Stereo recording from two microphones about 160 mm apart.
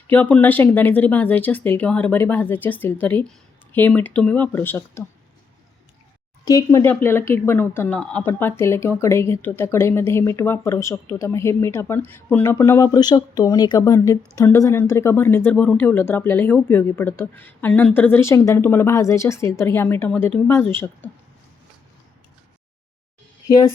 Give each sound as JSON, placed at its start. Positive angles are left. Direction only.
{"t": 0.1, "sound": "speech", "side_deg": 10}
{"t": 6.4, "sound": "speech", "side_deg": 20}